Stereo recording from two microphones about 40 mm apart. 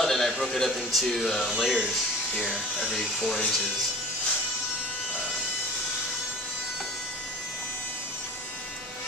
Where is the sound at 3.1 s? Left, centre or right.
Centre.